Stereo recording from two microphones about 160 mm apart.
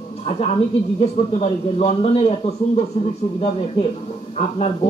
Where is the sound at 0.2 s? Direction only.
40° left (ahead or behind).